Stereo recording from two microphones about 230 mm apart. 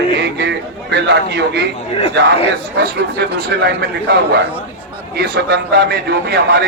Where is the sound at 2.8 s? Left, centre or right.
Right.